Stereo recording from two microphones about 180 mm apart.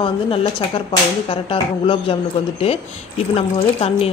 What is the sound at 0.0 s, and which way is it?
Speech, 30° left (ahead or behind).